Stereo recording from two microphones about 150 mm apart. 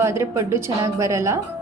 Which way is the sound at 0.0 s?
20° right (ahead or behind).